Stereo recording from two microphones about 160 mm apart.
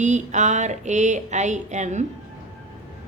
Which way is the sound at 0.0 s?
50° right (ahead or behind).